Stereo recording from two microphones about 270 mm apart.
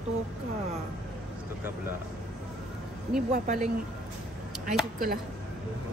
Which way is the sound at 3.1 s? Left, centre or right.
Right.